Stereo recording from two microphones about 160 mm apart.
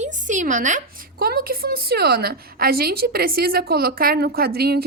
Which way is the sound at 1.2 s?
70° right (ahead or behind).